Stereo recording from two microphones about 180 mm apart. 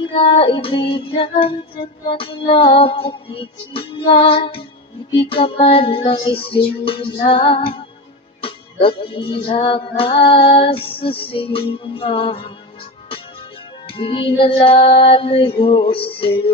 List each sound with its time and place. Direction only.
0.1 s music: 30° left (ahead or behind)
13.8 s music: 30° left (ahead or behind)